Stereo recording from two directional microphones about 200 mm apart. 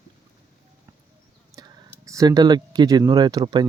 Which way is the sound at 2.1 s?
15° right (ahead or behind).